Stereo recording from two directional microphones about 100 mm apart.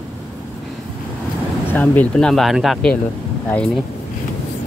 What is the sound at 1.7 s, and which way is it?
Speech, 15° left (ahead or behind).